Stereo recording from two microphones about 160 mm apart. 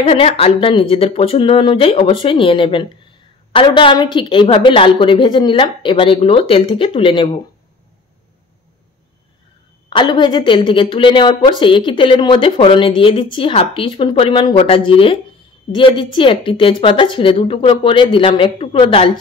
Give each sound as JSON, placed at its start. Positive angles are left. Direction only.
{"t": 0.0, "sound": "speech", "side_deg": 40}
{"t": 9.8, "sound": "speech", "side_deg": 30}